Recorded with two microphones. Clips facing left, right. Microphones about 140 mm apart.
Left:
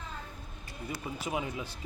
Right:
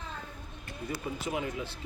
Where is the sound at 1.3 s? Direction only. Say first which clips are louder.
Even; 20° left (ahead or behind).